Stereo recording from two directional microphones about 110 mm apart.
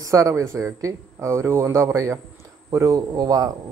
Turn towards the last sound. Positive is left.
turn(degrees=-30)  # may be behind; listen again after turning